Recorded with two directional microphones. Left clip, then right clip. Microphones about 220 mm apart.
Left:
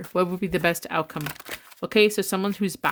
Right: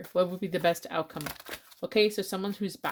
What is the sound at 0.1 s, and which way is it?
Speech, 30° left (ahead or behind).